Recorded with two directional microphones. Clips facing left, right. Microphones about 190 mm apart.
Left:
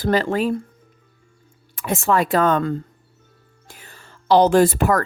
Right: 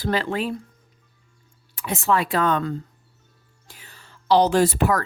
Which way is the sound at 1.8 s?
50° left (ahead or behind).